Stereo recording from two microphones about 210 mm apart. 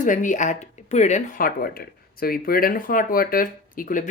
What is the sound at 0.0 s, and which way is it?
Speech, 40° left (ahead or behind).